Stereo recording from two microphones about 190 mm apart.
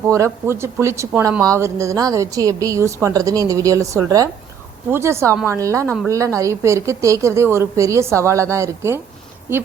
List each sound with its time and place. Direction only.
0.4 s speech: 15° right (ahead or behind)